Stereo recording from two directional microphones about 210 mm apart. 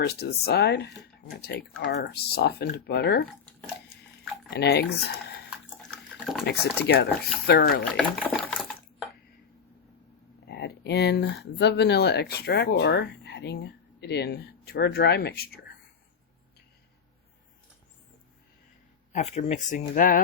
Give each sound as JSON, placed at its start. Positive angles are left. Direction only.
{"t": 0.0, "sound": "speech", "side_deg": 50}
{"t": 4.5, "sound": "speech", "side_deg": 55}
{"t": 5.7, "sound": "water", "side_deg": 0}
{"t": 6.4, "sound": "speech", "side_deg": 50}
{"t": 7.9, "sound": "water", "side_deg": 5}
{"t": 10.4, "sound": "a sound", "side_deg": 50}
{"t": 11.5, "sound": "speech", "side_deg": 55}
{"t": 19.1, "sound": "speech", "side_deg": 30}